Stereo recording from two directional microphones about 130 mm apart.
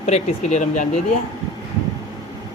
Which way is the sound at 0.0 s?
60° left (ahead or behind).